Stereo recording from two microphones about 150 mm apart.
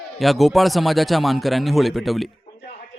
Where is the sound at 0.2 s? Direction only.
Centre (ahead or behind).